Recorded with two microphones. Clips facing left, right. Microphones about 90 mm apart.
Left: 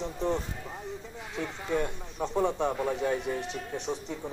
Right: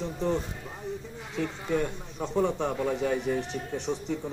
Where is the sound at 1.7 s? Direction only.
15° left (ahead or behind).